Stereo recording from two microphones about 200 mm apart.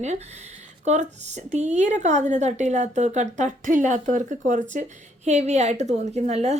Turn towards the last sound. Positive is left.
turn(degrees=-35)  # may be behind; listen again after turning